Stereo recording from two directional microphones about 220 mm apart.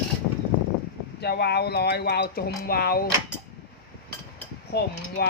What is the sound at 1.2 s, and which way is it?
Speech, 45° left (ahead or behind).